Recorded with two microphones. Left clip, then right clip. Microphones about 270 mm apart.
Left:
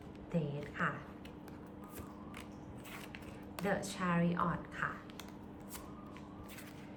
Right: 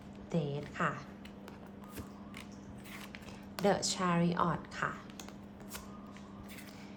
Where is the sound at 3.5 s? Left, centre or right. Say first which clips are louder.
Right 6 dB; centre.